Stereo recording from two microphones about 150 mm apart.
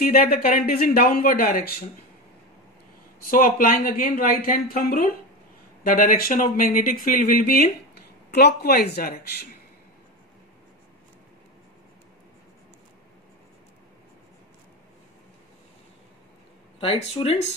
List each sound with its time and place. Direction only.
0.0 s speech: 70° left (ahead or behind)
3.2 s speech: 70° left (ahead or behind)
8.4 s speech: 90° left
16.8 s speech: 40° left (ahead or behind)